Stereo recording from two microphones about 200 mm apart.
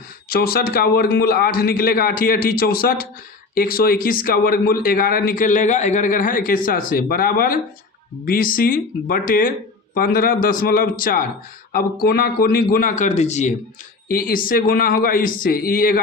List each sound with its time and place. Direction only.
0.3 s speech: 50° left (ahead or behind)
14.1 s speech: 45° left (ahead or behind)